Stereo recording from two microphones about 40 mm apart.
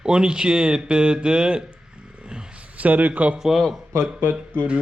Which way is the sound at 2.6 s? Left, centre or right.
Right.